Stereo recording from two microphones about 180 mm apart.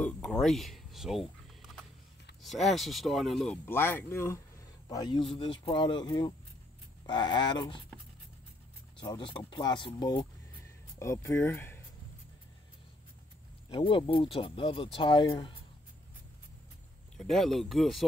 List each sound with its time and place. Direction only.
0.0 s a sound: 5° left (ahead or behind)
2.4 s speech: centre (ahead or behind)
3.6 s speech: 10° left (ahead or behind)
9.0 s speech: 25° left (ahead or behind)
13.7 s speech: 30° left (ahead or behind)
17.2 s speech: centre (ahead or behind)